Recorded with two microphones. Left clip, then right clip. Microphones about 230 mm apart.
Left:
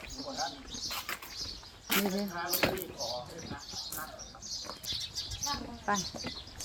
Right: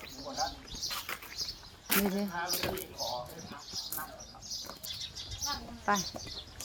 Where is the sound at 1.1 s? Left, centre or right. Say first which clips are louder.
Left 1 dB; centre.